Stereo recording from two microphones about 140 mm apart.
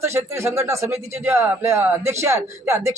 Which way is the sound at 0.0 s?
20° right (ahead or behind).